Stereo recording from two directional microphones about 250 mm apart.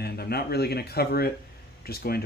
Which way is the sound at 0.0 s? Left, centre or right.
Left.